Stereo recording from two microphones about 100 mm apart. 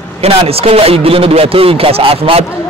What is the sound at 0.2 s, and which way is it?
A man's voice, 85° right.